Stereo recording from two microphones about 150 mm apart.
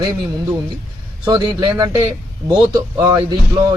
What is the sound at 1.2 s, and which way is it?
Speech, 30° right (ahead or behind).